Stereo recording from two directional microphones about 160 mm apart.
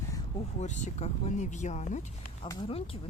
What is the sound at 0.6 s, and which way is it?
Speech, 45° left (ahead or behind).